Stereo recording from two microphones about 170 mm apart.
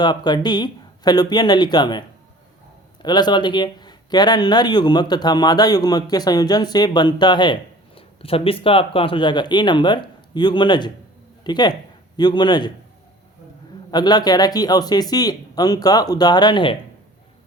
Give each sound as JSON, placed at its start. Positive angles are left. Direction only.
{"t": 0.0, "sound": "speech", "side_deg": 25}
{"t": 13.9, "sound": "speech", "side_deg": 25}